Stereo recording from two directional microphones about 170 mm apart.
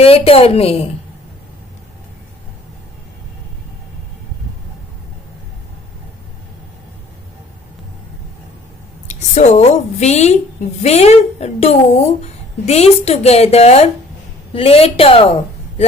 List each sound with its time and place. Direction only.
0.0 s a woman's voice: 35° left (ahead or behind)
9.0 s a woman's voice: 40° left (ahead or behind)